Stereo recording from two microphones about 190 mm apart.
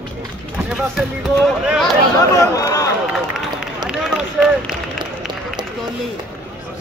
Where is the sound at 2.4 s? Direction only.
15° left (ahead or behind).